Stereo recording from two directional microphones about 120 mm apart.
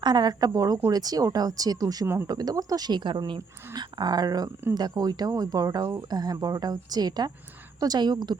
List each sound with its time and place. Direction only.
0.0 s speech: 35° right (ahead or behind)